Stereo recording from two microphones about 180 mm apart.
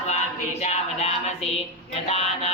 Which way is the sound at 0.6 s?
35° left (ahead or behind).